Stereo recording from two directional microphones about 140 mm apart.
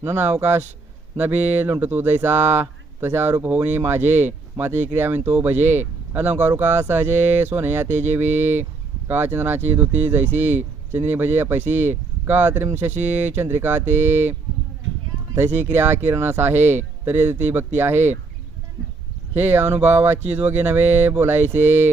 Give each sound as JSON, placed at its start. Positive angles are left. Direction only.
{"t": 0.0, "sound": "speech", "side_deg": -15}
{"t": 15.4, "sound": "speech", "side_deg": -15}
{"t": 19.3, "sound": "speech", "side_deg": -15}